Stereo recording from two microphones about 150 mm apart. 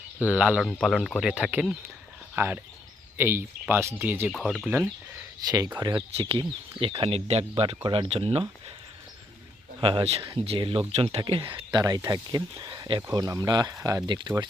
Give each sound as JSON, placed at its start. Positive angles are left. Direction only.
{"t": 0.2, "sound": "speech", "side_deg": -10}
{"t": 4.3, "sound": "speech", "side_deg": 0}
{"t": 5.4, "sound": "speech", "side_deg": -25}
{"t": 6.1, "sound": "speech", "side_deg": -40}
{"t": 9.8, "sound": "speech", "side_deg": -40}